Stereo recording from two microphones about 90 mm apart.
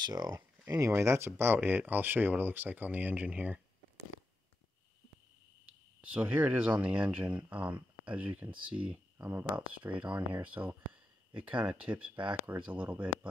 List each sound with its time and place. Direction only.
0.0 s speech: 45° right (ahead or behind)
0.7 s speech: 35° right (ahead or behind); by 3.6 s 15° right (ahead or behind)
5.9 s speech: 15° right (ahead or behind)